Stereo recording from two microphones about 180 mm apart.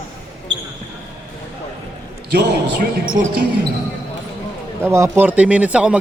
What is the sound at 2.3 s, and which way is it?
Speech, 70° right (ahead or behind).